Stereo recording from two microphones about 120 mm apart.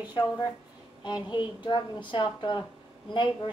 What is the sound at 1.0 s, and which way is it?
A woman's voice, 40° left (ahead or behind).